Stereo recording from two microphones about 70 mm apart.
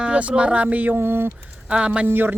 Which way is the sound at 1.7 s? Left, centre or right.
Centre.